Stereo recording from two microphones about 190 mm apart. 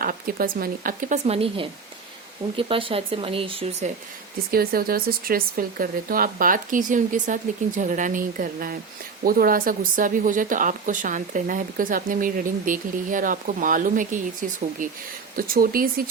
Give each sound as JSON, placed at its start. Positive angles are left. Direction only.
{"t": 0.0, "sound": "a woman's voice", "side_deg": -50}
{"t": 4.5, "sound": "a woman's voice", "side_deg": -50}